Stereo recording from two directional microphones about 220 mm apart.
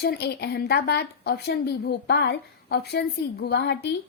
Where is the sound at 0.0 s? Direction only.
45° left (ahead or behind).